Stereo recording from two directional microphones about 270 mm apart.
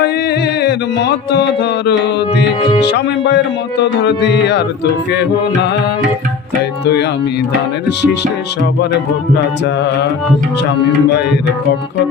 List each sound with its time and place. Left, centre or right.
0.0 s music: left
3.2 s speech: left